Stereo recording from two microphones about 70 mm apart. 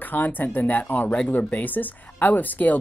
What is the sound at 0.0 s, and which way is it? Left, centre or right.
Speech, left.